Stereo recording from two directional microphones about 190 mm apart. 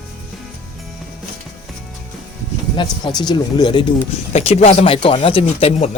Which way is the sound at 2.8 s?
25° left (ahead or behind).